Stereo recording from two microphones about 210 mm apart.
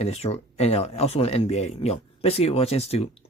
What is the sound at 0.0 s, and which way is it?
Speech, 30° left (ahead or behind).